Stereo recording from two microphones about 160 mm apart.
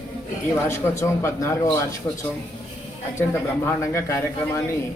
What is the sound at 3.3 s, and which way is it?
Speech, 15° left (ahead or behind).